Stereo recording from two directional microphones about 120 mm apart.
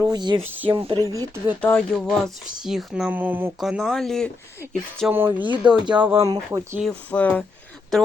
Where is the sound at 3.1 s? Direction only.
15° right (ahead or behind).